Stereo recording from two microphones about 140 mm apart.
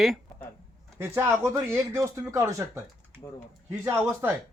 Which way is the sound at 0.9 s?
20° right (ahead or behind).